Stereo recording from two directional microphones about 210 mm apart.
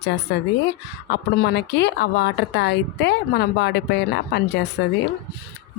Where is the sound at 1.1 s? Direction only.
50° left (ahead or behind).